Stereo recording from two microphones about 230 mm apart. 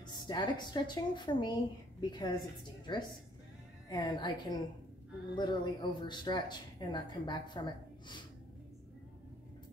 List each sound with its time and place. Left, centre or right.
0.0 s a woman's voice: centre